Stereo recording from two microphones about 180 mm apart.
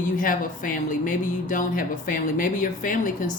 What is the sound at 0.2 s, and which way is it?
Speech, 50° left (ahead or behind).